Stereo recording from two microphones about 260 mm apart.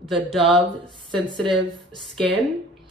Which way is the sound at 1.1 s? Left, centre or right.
Centre.